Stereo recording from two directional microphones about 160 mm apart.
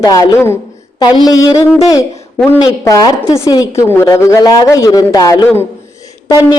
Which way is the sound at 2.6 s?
25° left (ahead or behind).